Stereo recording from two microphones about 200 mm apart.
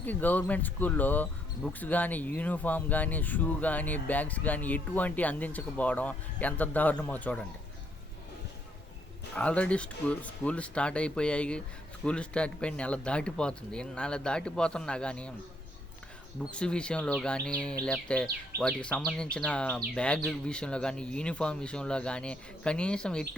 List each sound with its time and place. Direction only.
0.0 s speech: 10° left (ahead or behind)
9.3 s speech: 5° left (ahead or behind)
16.4 s speech: 5° left (ahead or behind)